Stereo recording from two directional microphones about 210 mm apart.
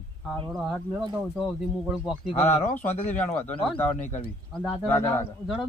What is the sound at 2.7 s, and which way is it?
Speech, 35° left (ahead or behind).